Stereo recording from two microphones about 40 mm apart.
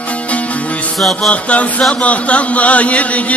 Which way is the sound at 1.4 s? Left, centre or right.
Left.